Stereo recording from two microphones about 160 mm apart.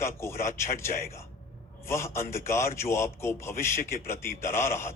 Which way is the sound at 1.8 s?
15° left (ahead or behind).